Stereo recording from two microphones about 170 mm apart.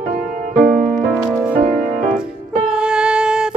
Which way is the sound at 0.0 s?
50° right (ahead or behind).